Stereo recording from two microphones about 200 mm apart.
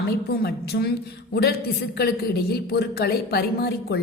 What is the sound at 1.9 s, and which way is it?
Speech, 50° left (ahead or behind).